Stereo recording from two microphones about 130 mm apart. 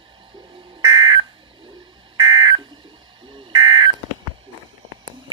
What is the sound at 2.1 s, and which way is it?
Smoke detector, 35° right (ahead or behind).